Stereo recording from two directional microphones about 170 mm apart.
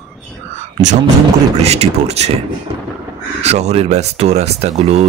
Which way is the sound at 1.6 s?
40° right (ahead or behind).